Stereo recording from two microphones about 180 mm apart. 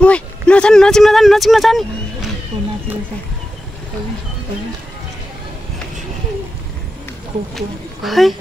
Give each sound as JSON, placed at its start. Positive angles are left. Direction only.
{"t": 0.0, "sound": "speech", "side_deg": 5}
{"t": 2.5, "sound": "speech", "side_deg": -20}
{"t": 7.5, "sound": "speech", "side_deg": 0}